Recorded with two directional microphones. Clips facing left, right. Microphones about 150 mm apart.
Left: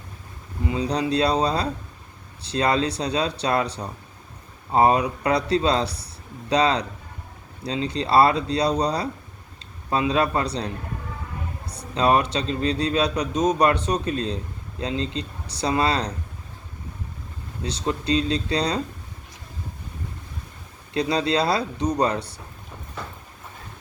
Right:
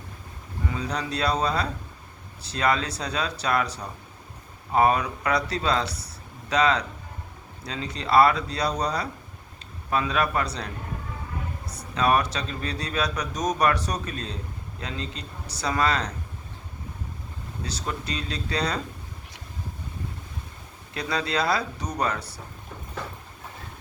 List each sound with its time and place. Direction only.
0.8 s speech: 35° left (ahead or behind)
11.9 s speech: 30° left (ahead or behind)
17.8 s speech: 30° left (ahead or behind)
20.9 s speech: 30° left (ahead or behind)